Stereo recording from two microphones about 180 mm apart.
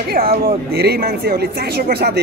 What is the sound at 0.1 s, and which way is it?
Speech, 55° right (ahead or behind).